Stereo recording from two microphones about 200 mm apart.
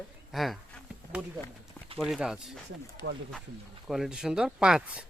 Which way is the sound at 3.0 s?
55° right (ahead or behind).